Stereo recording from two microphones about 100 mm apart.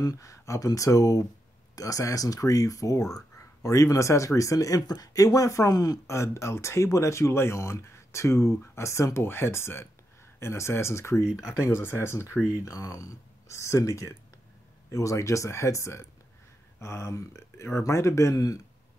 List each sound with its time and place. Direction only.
0.0 s speech: 35° left (ahead or behind)